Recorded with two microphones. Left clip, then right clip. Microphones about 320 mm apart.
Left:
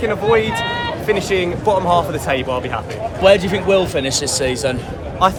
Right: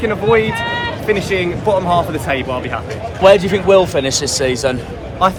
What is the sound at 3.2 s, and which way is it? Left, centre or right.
Speech, centre.